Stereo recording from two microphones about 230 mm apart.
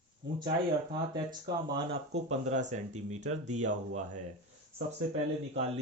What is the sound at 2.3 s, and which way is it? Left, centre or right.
Speech, right.